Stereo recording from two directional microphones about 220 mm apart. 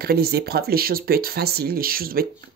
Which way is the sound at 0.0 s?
45° right (ahead or behind).